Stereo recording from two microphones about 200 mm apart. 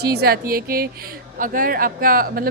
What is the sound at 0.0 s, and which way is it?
Speech, 55° right (ahead or behind).